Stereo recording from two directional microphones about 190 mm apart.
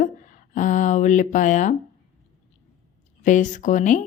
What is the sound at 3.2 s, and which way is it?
Speech, 40° left (ahead or behind).